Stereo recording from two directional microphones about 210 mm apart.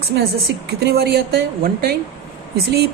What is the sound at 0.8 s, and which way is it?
A woman's voice, 50° right (ahead or behind).